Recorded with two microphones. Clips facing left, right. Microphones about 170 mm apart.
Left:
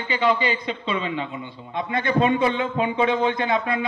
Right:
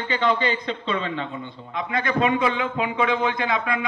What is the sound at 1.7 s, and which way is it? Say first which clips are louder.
Speech: left 2 dB; 30° left (ahead or behind).